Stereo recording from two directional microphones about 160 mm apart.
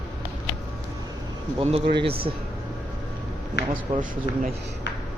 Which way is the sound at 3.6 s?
90° left.